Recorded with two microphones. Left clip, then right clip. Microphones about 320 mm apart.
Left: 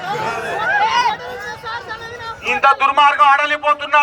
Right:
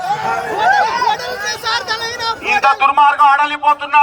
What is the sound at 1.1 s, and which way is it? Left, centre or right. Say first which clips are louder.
Vehicle: right 5 dB; right.